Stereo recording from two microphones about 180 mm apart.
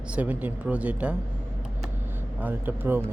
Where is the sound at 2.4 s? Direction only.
10° right (ahead or behind).